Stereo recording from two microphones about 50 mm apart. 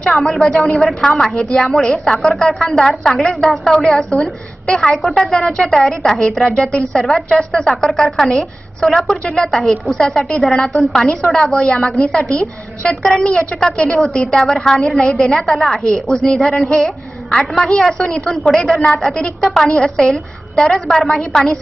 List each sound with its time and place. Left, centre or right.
0.2 s a woman's voice: centre
9.2 s a woman's voice: centre
15.8 s a woman's voice: centre
16.4 s a woman's voice: centre